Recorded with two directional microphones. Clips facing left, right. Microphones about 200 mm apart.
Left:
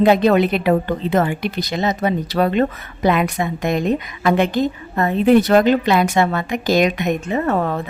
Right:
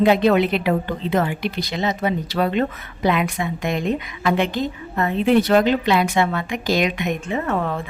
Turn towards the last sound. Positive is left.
turn(degrees=40)  # may be behind; listen again after turning